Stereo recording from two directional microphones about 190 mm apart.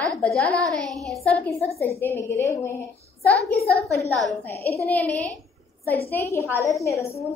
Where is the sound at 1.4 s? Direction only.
10° left (ahead or behind).